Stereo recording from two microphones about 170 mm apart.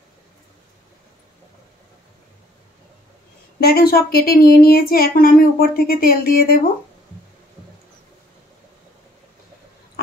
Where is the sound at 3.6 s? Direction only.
65° left (ahead or behind).